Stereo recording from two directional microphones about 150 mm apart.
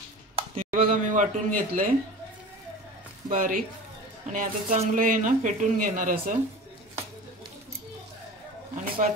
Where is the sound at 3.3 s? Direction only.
65° right (ahead or behind).